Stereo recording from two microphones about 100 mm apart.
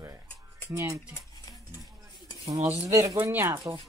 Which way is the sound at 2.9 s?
35° right (ahead or behind).